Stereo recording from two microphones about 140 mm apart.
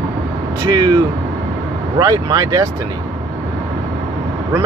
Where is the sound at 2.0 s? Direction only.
30° right (ahead or behind).